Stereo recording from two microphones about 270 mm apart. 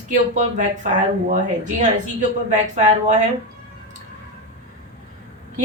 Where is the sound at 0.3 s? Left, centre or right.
Right.